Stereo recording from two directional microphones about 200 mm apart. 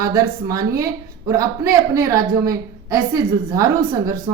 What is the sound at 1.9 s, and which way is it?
Speech, 15° right (ahead or behind).